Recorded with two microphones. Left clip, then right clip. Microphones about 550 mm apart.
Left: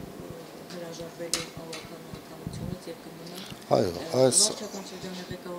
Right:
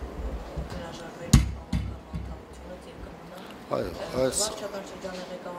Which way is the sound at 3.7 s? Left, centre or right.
Left.